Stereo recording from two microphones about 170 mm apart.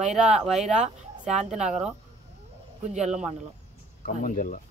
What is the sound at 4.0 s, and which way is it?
Speech, 50° left (ahead or behind).